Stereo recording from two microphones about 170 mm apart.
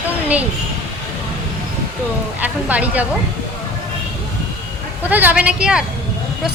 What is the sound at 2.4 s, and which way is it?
Speech, 10° right (ahead or behind).